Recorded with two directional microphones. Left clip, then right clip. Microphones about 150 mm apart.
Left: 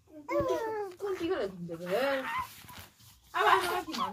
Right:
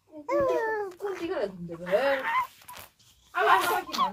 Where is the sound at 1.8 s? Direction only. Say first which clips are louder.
Right 5 dB; 30° right (ahead or behind).